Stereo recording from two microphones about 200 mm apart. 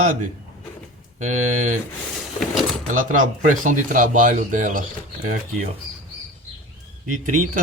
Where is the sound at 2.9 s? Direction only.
40° right (ahead or behind).